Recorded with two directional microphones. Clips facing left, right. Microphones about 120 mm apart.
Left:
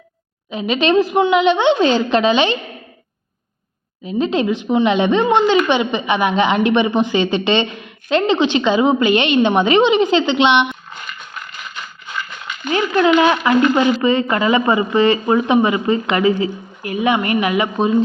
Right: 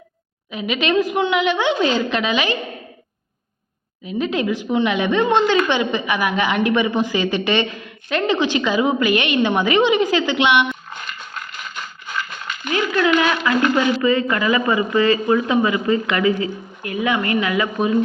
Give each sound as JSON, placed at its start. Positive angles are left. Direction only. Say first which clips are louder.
{"t": 0.5, "sound": "a woman's voice", "louder": "left 4 dB", "side_deg": 30}
{"t": 4.0, "sound": "a woman's voice", "louder": "left 4 dB", "side_deg": 30}
{"t": 12.7, "sound": "a woman's voice", "louder": "left 4 dB", "side_deg": 25}